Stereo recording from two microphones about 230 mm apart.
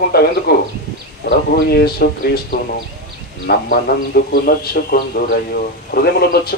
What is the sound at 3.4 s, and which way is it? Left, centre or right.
A man's voice, left.